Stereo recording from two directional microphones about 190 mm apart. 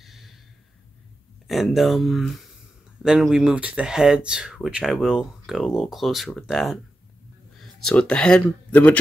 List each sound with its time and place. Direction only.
0.0 s gasp: centre (ahead or behind)
1.5 s speech: centre (ahead or behind)